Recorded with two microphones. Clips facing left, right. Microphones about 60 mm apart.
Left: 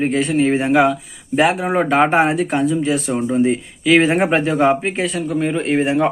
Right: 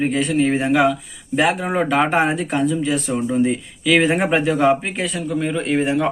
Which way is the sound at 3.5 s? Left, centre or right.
Left.